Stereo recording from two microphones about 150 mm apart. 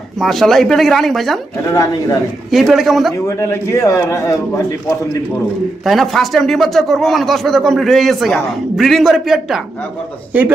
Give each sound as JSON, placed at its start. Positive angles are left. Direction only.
{"t": 0.2, "sound": "speech", "side_deg": 0}
{"t": 1.7, "sound": "a man's voice", "side_deg": 20}
{"t": 2.5, "sound": "speech", "side_deg": 0}
{"t": 3.2, "sound": "a man's voice", "side_deg": 20}
{"t": 5.8, "sound": "speech", "side_deg": 0}